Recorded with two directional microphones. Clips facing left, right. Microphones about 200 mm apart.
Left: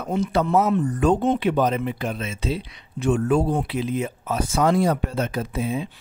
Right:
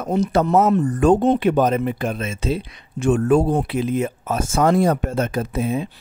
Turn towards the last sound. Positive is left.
turn(degrees=-50)  # may be behind; listen again after turning